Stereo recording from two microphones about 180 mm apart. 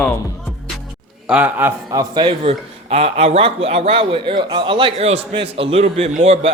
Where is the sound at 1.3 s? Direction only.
10° right (ahead or behind).